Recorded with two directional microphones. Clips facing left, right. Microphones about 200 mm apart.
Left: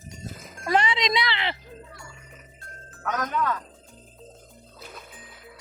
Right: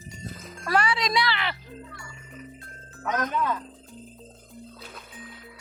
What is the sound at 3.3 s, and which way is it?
Speech, 15° right (ahead or behind).